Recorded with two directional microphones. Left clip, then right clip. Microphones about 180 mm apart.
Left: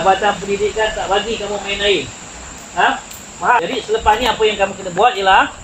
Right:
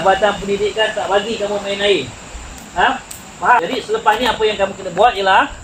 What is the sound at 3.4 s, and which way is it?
Speech, 10° right (ahead or behind).